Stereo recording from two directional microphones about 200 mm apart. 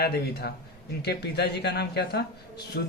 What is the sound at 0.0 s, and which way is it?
Speech, 50° left (ahead or behind).